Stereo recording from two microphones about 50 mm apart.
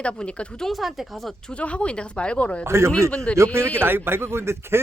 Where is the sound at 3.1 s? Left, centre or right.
Centre.